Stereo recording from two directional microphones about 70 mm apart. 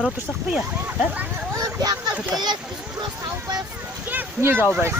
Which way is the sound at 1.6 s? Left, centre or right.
Right.